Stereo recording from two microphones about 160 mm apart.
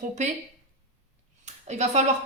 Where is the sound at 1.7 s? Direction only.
45° right (ahead or behind).